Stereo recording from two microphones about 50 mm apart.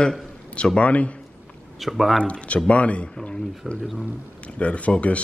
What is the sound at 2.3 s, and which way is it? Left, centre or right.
Speech, left.